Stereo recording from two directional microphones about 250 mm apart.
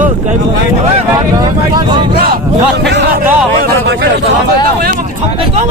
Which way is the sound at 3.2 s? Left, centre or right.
Centre.